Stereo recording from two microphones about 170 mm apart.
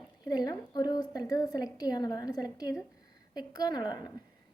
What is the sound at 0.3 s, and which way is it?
A woman's voice, 20° left (ahead or behind).